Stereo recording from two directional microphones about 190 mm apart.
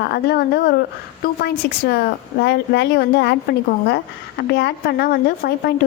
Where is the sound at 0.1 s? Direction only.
55° left (ahead or behind).